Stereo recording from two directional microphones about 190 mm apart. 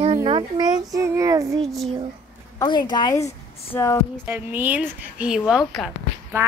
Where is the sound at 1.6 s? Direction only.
Centre (ahead or behind).